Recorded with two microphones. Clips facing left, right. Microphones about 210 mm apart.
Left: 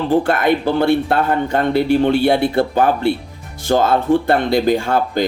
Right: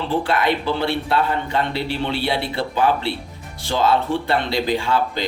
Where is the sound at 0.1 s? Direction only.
50° left (ahead or behind).